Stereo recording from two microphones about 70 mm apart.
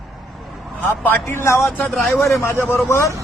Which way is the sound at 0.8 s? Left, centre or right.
Left.